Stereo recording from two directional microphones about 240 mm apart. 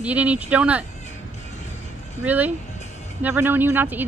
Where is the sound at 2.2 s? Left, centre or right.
Centre.